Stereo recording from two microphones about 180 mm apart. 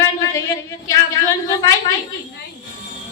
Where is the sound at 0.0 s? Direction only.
15° left (ahead or behind).